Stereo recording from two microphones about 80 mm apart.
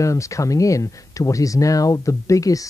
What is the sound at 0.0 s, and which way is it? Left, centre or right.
Speech, left.